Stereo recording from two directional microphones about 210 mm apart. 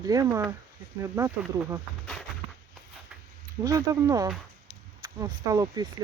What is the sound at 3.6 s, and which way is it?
Speech, 15° right (ahead or behind).